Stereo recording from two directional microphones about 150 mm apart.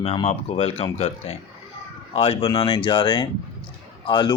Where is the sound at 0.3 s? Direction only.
40° left (ahead or behind).